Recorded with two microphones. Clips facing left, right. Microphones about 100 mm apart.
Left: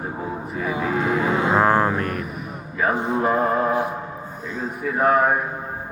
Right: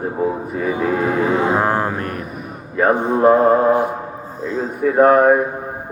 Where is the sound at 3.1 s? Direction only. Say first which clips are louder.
Right 10 dB; 50° right (ahead or behind).